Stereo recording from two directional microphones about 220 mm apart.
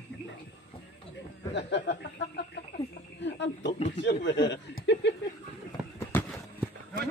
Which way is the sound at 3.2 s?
55° left (ahead or behind).